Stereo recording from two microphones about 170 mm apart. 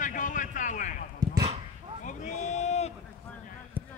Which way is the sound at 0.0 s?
50° left (ahead or behind).